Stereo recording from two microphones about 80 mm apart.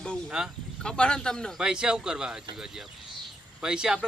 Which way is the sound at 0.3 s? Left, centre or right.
Centre.